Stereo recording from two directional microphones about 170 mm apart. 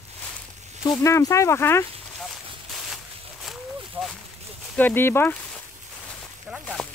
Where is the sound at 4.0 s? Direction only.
10° right (ahead or behind).